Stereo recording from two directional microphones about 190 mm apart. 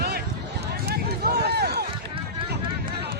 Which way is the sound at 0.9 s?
55° right (ahead or behind).